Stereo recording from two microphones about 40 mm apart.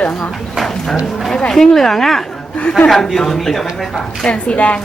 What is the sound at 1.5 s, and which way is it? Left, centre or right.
Speech, centre.